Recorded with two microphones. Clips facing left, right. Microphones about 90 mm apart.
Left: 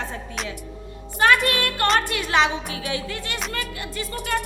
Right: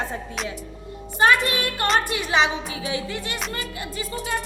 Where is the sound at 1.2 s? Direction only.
20° right (ahead or behind).